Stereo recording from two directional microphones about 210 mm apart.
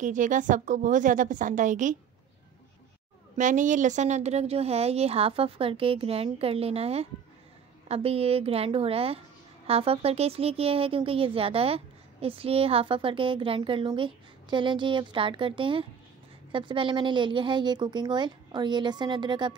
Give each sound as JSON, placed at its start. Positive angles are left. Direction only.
{"t": 0.0, "sound": "a woman's voice", "side_deg": -35}
{"t": 3.3, "sound": "speech", "side_deg": -35}